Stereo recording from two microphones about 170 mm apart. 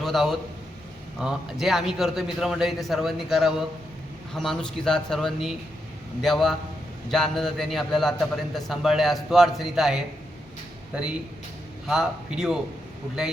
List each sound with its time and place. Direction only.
0.0 s a man's voice: centre (ahead or behind)
11.9 s a man's voice: 5° right (ahead or behind)